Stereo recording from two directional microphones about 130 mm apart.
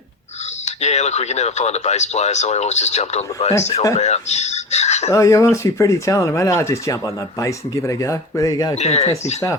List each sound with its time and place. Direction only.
0.6 s speech: 60° left (ahead or behind)
5.1 s speech: 25° left (ahead or behind)
8.7 s speech: 55° left (ahead or behind)